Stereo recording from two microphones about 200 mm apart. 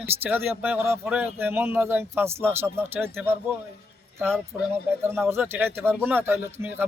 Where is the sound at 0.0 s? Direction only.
10° right (ahead or behind).